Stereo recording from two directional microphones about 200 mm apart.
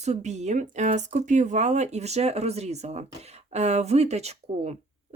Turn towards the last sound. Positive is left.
turn(degrees=-30)  # may be behind; listen again after turning